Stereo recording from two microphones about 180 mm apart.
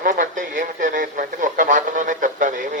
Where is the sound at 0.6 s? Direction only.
45° right (ahead or behind).